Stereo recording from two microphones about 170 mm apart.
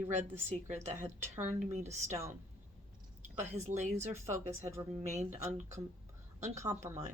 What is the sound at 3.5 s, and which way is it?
Speech, 40° right (ahead or behind).